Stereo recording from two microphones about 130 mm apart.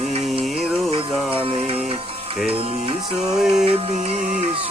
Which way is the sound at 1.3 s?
45° right (ahead or behind).